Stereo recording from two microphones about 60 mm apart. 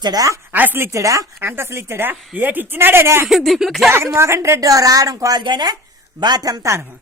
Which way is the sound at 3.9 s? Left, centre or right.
Right.